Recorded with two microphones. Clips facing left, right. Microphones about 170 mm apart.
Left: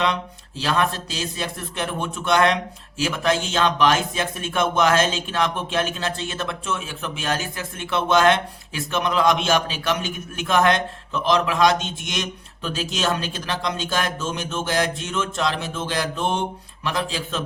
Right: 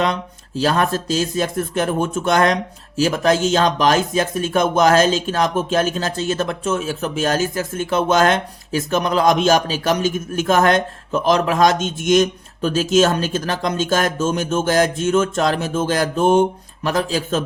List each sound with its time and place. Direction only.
0.0 s speech: 45° right (ahead or behind)